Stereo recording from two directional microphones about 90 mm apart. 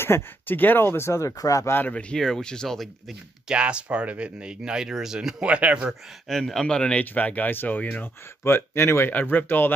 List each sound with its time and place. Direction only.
0.0 s speech: 25° left (ahead or behind)
1.8 s speech: 15° left (ahead or behind)
3.4 s speech: 10° right (ahead or behind)
6.2 s speech: 5° left (ahead or behind); by 9.7 s 20° left (ahead or behind)